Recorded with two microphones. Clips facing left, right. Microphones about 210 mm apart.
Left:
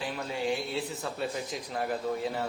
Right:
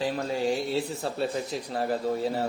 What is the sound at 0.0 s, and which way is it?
Speech, 35° right (ahead or behind).